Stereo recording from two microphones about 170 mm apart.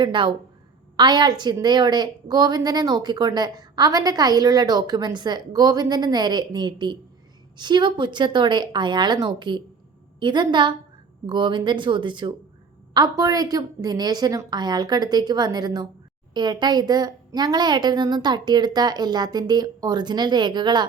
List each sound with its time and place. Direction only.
0.0 s a woman's voice: 30° right (ahead or behind)